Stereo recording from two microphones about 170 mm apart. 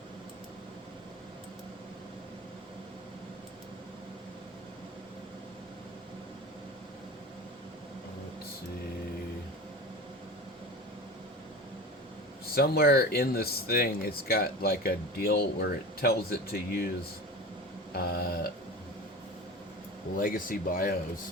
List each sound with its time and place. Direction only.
12.5 s speech: 65° left (ahead or behind)
17.9 s a sound: 65° left (ahead or behind)
20.1 s speech: 55° left (ahead or behind)